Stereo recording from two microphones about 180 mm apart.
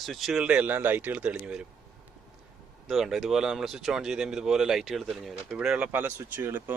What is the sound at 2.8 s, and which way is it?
Speech, centre (ahead or behind).